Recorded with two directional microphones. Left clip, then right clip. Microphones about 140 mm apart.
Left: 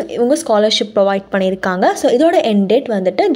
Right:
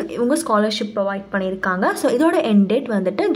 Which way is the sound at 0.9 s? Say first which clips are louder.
Left 8 dB; 50° left (ahead or behind).